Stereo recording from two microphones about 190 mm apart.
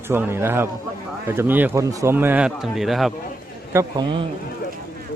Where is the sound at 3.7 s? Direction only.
20° right (ahead or behind).